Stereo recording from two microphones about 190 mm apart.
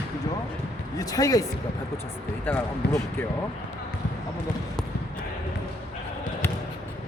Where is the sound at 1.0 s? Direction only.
20° left (ahead or behind).